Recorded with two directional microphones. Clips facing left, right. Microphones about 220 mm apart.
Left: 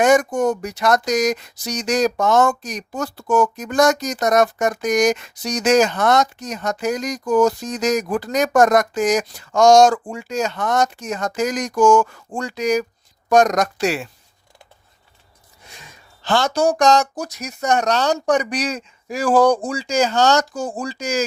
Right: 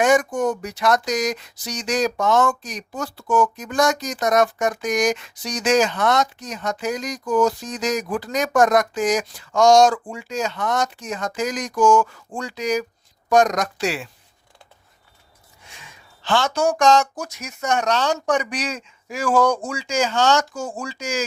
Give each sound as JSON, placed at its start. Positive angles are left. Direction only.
{"t": 0.0, "sound": "speech", "side_deg": 40}
{"t": 15.8, "sound": "speech", "side_deg": 40}